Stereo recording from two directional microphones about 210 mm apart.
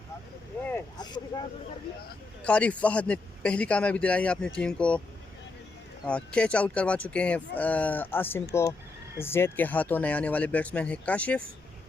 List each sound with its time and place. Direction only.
0.7 s vehicle: 20° left (ahead or behind)
2.4 s a man's voice: 5° left (ahead or behind)
6.1 s speech: 5° left (ahead or behind)